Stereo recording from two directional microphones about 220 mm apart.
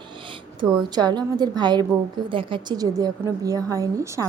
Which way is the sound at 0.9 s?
20° right (ahead or behind).